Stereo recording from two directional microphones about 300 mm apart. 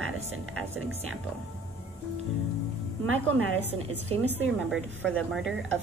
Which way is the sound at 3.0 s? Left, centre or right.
Right.